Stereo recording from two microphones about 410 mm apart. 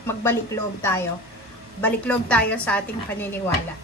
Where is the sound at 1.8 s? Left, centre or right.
Centre.